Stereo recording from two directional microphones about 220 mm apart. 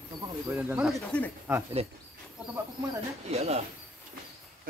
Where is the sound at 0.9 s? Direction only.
5° left (ahead or behind).